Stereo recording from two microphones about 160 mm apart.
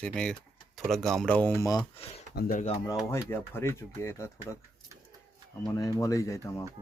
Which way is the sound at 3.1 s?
15° left (ahead or behind).